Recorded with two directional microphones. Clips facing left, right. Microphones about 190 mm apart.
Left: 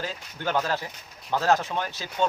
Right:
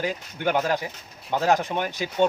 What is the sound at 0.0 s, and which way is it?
Speech, 15° right (ahead or behind).